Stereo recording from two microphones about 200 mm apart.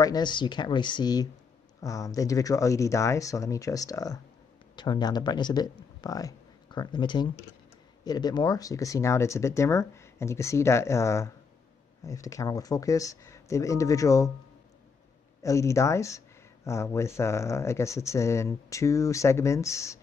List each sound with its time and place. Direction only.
0.0 s speech: 20° left (ahead or behind)
15.4 s speech: 15° left (ahead or behind)